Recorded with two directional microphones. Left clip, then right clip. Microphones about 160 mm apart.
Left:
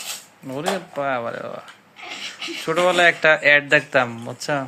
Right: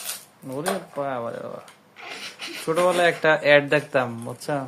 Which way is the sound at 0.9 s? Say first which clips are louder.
Left 4 dB; 15° right (ahead or behind).